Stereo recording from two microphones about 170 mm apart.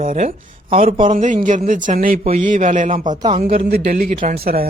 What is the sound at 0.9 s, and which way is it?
Speech, 30° right (ahead or behind).